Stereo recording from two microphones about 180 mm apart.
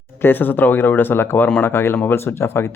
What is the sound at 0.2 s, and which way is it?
Speech, 10° left (ahead or behind).